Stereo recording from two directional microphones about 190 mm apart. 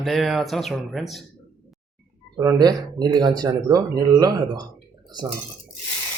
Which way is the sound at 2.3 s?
20° right (ahead or behind).